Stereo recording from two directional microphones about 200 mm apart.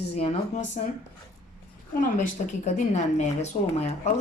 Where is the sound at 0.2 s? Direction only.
30° left (ahead or behind).